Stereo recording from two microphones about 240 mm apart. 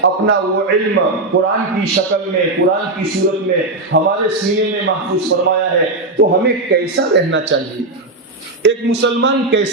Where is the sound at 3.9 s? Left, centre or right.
Right.